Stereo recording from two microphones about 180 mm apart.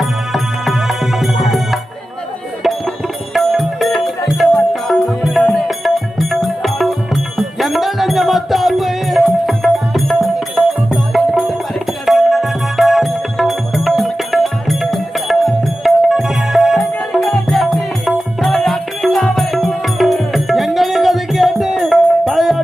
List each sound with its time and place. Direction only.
0.0 s music: centre (ahead or behind)
3.3 s music: centre (ahead or behind)